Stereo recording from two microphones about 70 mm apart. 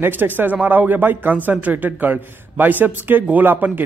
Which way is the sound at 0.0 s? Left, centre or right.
Right.